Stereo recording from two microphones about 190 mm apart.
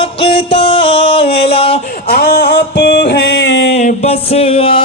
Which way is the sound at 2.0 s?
55° left (ahead or behind).